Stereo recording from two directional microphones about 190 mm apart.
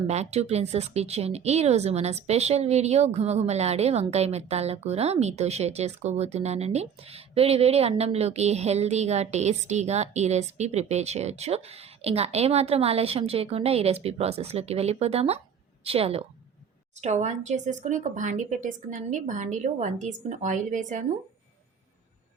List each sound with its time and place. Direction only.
0.1 s a woman's voice: 35° right (ahead or behind)